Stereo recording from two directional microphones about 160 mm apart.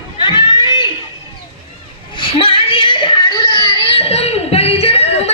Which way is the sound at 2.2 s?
35° left (ahead or behind).